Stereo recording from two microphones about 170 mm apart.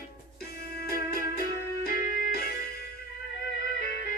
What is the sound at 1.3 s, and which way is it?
Music, 60° left (ahead or behind).